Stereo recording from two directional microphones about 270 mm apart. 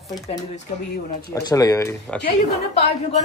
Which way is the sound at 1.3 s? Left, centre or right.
Centre.